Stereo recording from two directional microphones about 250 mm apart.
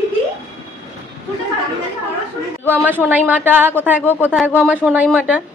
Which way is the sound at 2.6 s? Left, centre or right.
Centre.